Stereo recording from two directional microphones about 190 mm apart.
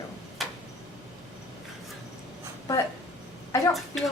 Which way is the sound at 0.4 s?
Centre (ahead or behind).